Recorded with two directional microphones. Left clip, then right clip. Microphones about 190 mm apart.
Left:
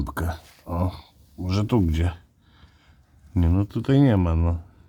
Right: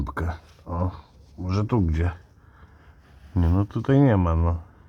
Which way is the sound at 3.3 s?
15° left (ahead or behind).